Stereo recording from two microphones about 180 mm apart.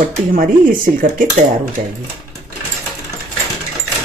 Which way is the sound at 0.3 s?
50° right (ahead or behind).